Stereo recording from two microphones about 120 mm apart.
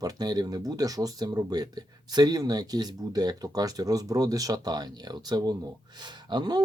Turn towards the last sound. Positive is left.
turn(degrees=-35)  # may be behind; listen again after turning